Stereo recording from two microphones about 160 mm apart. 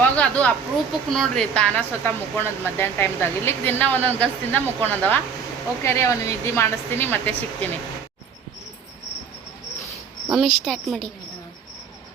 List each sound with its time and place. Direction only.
0.0 s a sound: 10° left (ahead or behind)
1.1 s speech: 5° left (ahead or behind)
10.3 s a woman's voice: centre (ahead or behind)